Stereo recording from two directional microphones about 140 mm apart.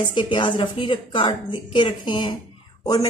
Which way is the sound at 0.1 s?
35° left (ahead or behind).